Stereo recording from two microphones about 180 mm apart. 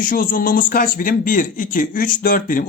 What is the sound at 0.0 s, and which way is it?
Speech, 50° left (ahead or behind).